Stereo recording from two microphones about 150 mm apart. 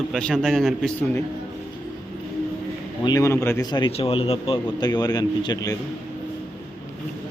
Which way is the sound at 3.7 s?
30° left (ahead or behind).